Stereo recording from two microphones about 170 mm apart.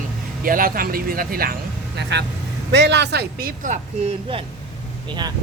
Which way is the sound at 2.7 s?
80° right.